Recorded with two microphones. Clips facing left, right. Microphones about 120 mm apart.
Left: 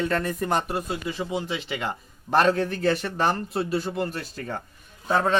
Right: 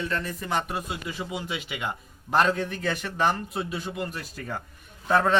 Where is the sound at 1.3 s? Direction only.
30° left (ahead or behind).